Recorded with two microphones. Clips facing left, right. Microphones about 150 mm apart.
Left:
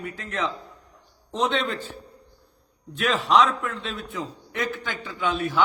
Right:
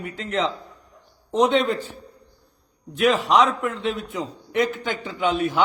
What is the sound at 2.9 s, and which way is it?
A man's voice, 15° right (ahead or behind).